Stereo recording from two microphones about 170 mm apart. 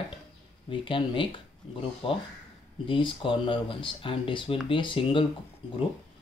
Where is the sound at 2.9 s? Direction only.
30° left (ahead or behind).